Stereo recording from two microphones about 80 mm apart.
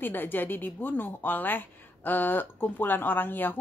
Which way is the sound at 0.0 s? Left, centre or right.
Left.